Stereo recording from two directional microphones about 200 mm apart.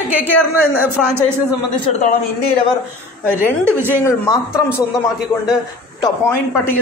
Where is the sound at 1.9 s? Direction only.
35° left (ahead or behind).